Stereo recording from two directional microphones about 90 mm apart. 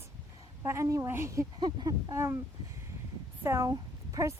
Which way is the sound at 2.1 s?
30° right (ahead or behind).